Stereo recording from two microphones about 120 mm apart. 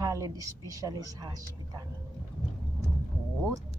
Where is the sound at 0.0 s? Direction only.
25° right (ahead or behind).